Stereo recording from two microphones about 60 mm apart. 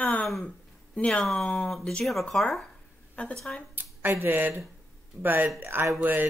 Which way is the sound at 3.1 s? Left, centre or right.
Centre.